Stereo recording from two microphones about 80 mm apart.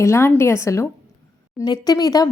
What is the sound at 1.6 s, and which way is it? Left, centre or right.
Speech, left.